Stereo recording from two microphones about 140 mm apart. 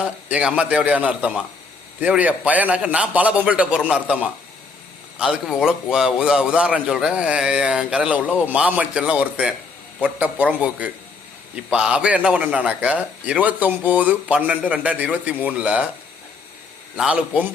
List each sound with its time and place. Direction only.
0.0 s a man's voice: 10° right (ahead or behind)
17.0 s a man's voice: 5° right (ahead or behind)